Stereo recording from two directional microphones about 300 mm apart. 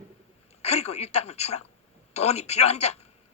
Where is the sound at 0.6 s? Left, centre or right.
Left.